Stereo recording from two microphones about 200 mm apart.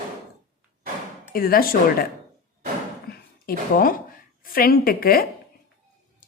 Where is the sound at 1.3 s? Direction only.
45° left (ahead or behind).